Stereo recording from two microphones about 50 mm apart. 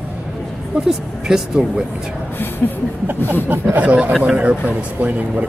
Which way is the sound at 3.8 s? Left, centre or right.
Right.